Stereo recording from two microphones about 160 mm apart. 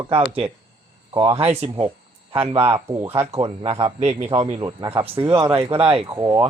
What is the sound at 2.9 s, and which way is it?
Speech, 15° right (ahead or behind).